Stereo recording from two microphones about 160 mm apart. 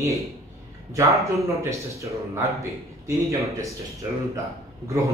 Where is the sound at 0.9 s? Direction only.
20° right (ahead or behind).